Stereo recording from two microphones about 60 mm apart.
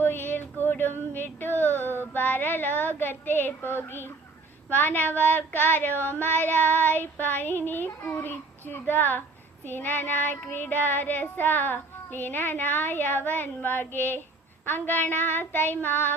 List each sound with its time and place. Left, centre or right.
0.0 s female singing: left
4.7 s child singing: left